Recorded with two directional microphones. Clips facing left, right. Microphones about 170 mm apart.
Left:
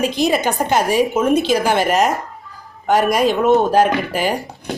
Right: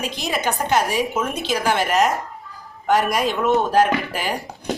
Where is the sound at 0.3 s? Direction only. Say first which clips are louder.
Left 5 dB; 30° left (ahead or behind).